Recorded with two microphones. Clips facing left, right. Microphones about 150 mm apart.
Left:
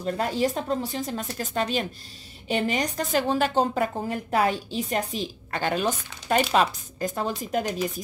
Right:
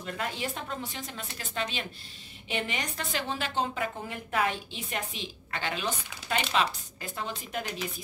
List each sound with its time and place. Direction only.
0.0 s a woman's voice: 40° left (ahead or behind)